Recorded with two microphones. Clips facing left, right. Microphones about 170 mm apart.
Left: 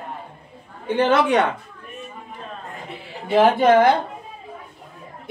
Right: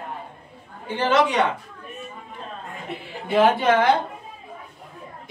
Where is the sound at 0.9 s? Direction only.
55° left (ahead or behind).